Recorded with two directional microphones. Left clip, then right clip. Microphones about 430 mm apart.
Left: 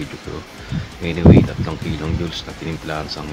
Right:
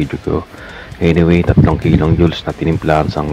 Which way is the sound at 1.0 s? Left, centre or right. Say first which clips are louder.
Right 2 dB; centre.